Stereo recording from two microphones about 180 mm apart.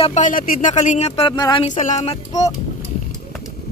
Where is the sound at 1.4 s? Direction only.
25° left (ahead or behind).